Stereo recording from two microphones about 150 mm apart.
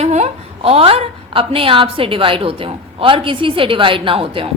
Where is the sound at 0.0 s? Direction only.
45° right (ahead or behind).